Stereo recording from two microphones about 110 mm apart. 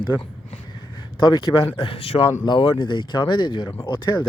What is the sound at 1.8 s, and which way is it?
Speech, 60° left (ahead or behind).